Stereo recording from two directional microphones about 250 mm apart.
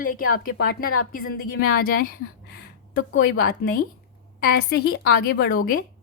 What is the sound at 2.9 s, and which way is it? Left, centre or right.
A woman's voice, left.